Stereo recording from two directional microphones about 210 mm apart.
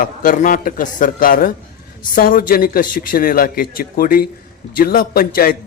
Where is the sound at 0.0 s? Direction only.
40° left (ahead or behind).